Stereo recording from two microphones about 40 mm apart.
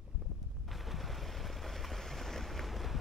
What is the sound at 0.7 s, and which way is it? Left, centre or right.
Boat, centre.